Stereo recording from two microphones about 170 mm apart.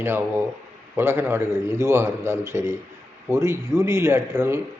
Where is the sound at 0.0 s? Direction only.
10° right (ahead or behind).